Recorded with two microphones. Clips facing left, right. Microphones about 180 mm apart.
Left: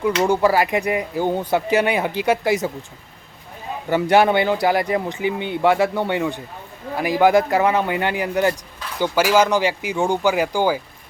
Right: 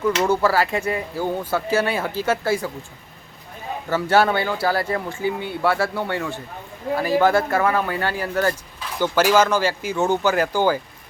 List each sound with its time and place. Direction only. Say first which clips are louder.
0.0 s speech: left 2 dB; 15° left (ahead or behind)
3.8 s speech: left 3 dB; 15° left (ahead or behind)